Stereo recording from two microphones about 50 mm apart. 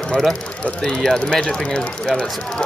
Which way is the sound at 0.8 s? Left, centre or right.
Centre.